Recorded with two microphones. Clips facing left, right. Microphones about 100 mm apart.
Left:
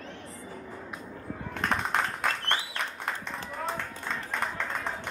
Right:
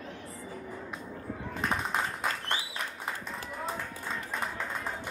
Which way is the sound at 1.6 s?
65° left (ahead or behind).